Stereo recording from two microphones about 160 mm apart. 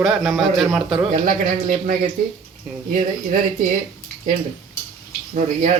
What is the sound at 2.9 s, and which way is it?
Speech, 60° right (ahead or behind).